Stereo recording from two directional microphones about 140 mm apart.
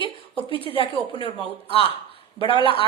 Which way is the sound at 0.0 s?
35° left (ahead or behind).